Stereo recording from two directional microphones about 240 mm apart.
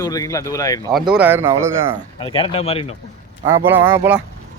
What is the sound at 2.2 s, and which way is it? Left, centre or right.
Speech, left.